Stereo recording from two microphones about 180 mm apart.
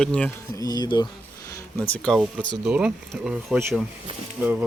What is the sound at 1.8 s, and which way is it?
Speech, 10° left (ahead or behind).